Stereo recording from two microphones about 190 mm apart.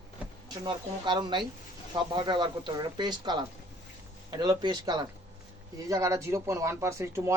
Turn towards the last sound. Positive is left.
turn(degrees=-15)  # may be behind; listen again after turning